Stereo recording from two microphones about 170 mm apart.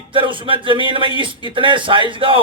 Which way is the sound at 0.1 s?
30° right (ahead or behind).